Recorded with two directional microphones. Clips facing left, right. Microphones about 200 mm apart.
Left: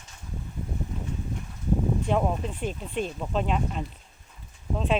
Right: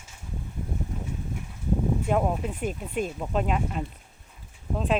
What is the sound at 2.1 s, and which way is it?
Speech, 5° right (ahead or behind).